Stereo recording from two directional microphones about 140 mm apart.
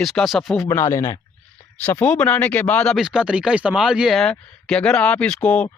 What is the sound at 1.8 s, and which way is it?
Speech, 10° left (ahead or behind).